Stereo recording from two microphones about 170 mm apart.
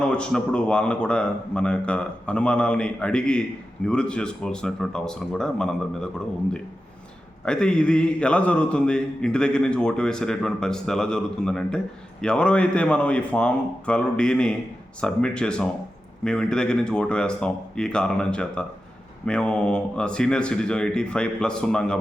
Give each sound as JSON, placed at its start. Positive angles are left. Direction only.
{"t": 0.0, "sound": "a man's voice", "side_deg": 5}
{"t": 7.4, "sound": "a man's voice", "side_deg": 5}